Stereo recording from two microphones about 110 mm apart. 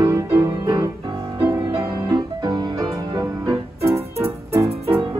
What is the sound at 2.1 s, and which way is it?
Music, 40° right (ahead or behind).